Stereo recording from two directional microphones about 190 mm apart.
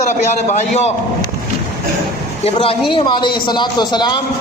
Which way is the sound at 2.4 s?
30° left (ahead or behind).